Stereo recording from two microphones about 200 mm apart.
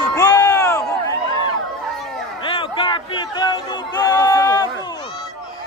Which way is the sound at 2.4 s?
25° left (ahead or behind).